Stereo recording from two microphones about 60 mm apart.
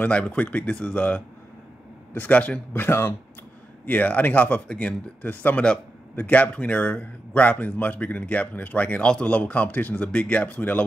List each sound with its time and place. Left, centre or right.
0.0 s a man's voice: left
2.7 s speech: left
3.8 s a man's voice: left
4.6 s speech: centre
5.2 s a man's voice: left